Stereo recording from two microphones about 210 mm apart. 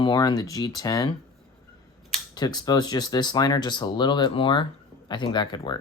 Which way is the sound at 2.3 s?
20° left (ahead or behind).